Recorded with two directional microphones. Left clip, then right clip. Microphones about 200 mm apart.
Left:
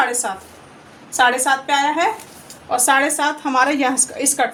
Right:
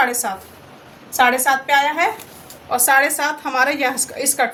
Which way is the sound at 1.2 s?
10° left (ahead or behind).